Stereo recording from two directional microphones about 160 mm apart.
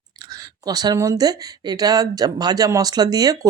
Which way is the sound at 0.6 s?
25° right (ahead or behind).